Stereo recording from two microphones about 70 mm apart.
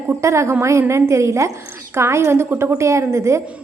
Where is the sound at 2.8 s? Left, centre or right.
Right.